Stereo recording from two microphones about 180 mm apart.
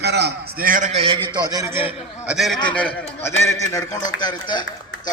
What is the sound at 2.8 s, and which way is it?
A man's voice, 10° left (ahead or behind).